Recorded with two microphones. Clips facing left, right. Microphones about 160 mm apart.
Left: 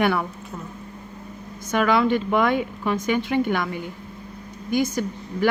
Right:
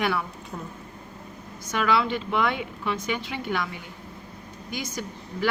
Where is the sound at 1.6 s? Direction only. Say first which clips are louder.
Left 5 dB; 50° left (ahead or behind).